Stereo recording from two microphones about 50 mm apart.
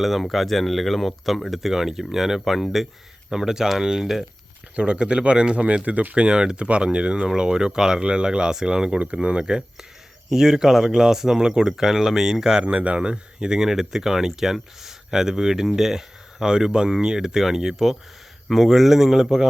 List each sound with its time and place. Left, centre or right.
0.0 s speech: centre
4.7 s speech: right
6.1 s speech: centre
12.6 s speech: right; by 19.5 s centre